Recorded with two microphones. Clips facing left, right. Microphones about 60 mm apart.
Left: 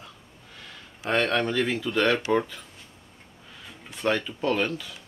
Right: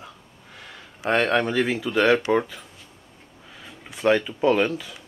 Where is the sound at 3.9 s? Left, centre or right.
Centre.